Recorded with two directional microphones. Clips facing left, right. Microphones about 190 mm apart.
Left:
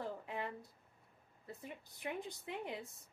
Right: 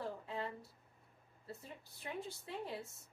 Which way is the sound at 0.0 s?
15° left (ahead or behind).